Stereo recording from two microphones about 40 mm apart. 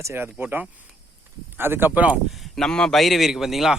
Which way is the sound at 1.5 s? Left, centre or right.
Right.